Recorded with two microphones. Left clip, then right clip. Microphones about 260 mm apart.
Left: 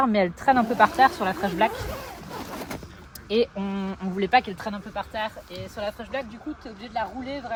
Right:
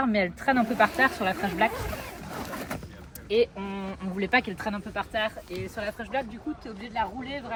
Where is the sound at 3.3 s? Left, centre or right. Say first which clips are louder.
Left 1 dB; left.